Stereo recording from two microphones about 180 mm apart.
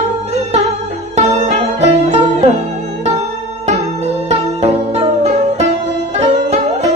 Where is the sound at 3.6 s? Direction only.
35° right (ahead or behind).